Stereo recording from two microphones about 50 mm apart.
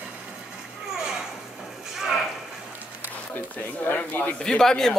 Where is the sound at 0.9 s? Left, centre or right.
Centre.